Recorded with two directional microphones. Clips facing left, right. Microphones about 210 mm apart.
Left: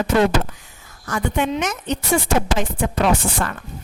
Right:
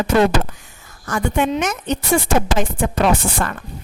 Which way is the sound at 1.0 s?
45° right (ahead or behind).